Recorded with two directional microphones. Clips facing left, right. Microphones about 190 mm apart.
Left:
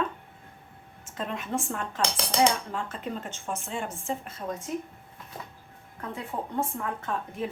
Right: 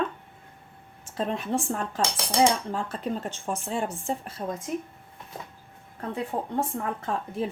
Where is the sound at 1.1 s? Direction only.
35° right (ahead or behind).